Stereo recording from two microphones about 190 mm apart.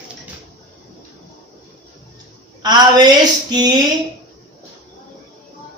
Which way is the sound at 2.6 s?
20° right (ahead or behind).